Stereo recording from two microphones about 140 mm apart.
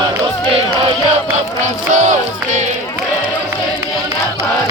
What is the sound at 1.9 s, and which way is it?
Music, 65° right (ahead or behind).